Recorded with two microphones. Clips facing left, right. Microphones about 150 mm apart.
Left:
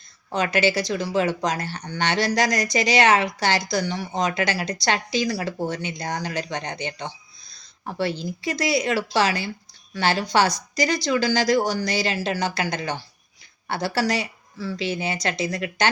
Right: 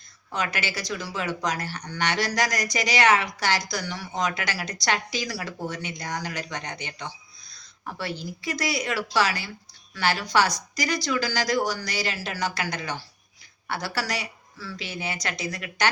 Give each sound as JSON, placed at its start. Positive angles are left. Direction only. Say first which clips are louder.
{"t": 0.3, "sound": "speech", "louder": "left 8 dB", "side_deg": 30}